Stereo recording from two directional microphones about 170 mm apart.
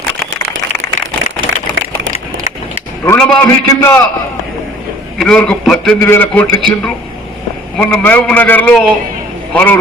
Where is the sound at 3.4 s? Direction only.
15° left (ahead or behind).